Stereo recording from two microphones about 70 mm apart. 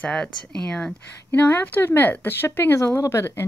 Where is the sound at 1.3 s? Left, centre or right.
Left.